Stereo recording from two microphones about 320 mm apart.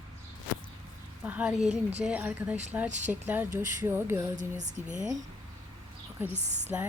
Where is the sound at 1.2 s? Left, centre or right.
Centre.